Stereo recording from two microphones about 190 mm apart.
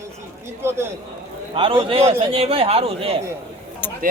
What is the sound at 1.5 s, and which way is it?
A man's voice, 30° right (ahead or behind).